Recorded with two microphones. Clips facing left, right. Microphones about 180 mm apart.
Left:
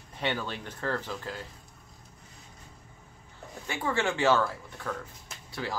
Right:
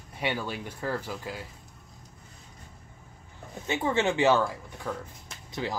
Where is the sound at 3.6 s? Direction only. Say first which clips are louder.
Right 3 dB; 20° right (ahead or behind).